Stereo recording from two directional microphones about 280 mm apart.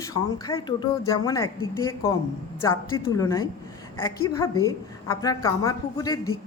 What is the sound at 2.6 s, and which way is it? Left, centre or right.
A man's voice, centre.